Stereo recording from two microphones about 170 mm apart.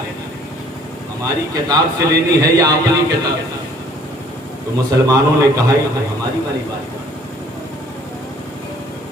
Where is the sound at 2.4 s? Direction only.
20° right (ahead or behind).